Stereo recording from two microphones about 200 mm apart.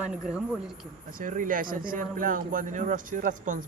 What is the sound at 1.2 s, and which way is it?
Speech, 40° right (ahead or behind).